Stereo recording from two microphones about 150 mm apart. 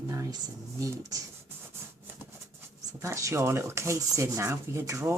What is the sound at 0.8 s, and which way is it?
Speech, 20° right (ahead or behind).